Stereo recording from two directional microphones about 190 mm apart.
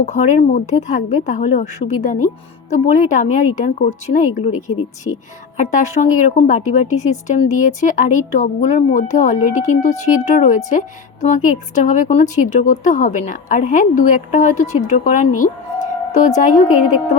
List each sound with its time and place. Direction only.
0.0 s a woman's voice: 35° left (ahead or behind)
5.5 s a woman's voice: 40° left (ahead or behind)